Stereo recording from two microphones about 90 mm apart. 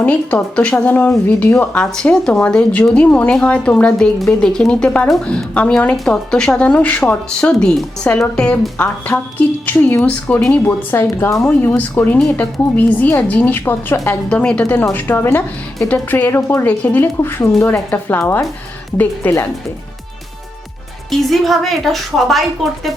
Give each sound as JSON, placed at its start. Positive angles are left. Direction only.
{"t": 0.0, "sound": "a woman's voice", "side_deg": 15}
{"t": 1.7, "sound": "speech", "side_deg": 10}
{"t": 10.7, "sound": "a woman's voice", "side_deg": 25}
{"t": 14.3, "sound": "speech", "side_deg": 15}
{"t": 14.9, "sound": "a woman's voice", "side_deg": 25}
{"t": 21.1, "sound": "a woman's voice", "side_deg": 0}